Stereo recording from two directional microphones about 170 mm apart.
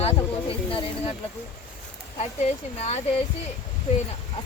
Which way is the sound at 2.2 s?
40° left (ahead or behind).